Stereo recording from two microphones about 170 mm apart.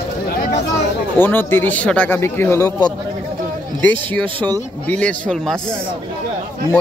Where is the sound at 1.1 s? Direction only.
10° left (ahead or behind).